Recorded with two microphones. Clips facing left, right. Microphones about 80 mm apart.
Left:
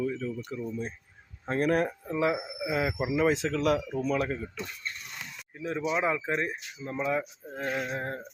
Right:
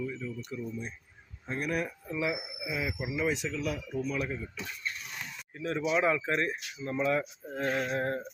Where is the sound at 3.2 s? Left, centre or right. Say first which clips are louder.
Left 7 dB; left.